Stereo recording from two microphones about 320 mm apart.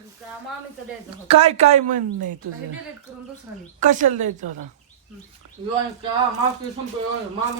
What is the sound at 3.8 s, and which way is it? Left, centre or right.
Speech, right.